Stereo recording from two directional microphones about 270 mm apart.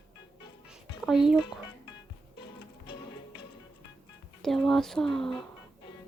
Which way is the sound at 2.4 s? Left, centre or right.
Centre.